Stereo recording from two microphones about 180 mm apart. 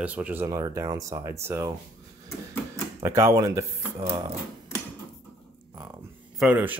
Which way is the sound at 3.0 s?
15° right (ahead or behind).